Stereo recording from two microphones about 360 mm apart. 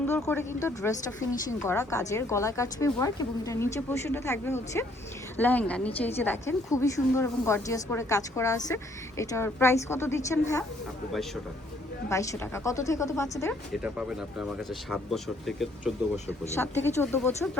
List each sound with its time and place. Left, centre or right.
0.0 s a woman's voice: centre
12.0 s a woman's voice: centre
13.8 s a woman's voice: centre